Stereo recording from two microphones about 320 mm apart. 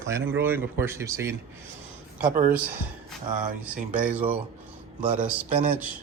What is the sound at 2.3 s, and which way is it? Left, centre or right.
Speech, right.